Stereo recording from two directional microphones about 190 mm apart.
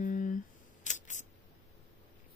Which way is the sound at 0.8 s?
40° left (ahead or behind).